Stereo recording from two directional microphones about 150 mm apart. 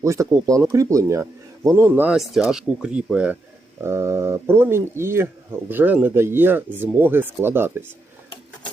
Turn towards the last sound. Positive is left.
turn(degrees=-15)  # may be behind; listen again after turning